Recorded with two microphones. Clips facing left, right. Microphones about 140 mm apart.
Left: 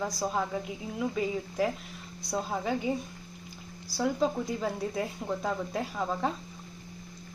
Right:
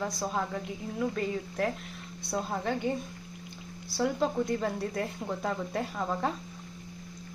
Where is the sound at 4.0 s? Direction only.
Centre (ahead or behind).